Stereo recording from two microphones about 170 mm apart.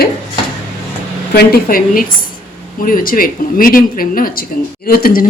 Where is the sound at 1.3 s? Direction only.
65° left (ahead or behind).